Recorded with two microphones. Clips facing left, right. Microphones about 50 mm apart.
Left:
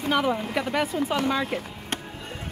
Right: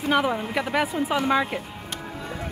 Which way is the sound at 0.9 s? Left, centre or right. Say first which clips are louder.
Right 2 dB; centre.